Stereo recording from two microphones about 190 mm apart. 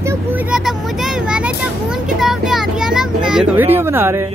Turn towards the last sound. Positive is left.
turn(degrees=-15)  # may be behind; listen again after turning